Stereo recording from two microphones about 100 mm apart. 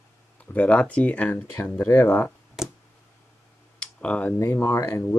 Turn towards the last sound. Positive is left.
turn(degrees=30)  # may be behind; listen again after turning